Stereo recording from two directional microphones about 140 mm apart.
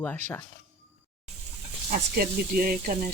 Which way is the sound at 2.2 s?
90° right.